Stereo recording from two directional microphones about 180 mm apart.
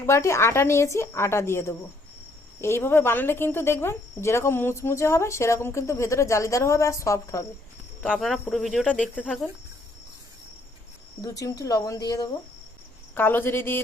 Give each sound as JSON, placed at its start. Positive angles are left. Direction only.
{"t": 0.0, "sound": "speech", "side_deg": 15}
{"t": 8.1, "sound": "cricket", "side_deg": 0}
{"t": 11.2, "sound": "speech", "side_deg": 20}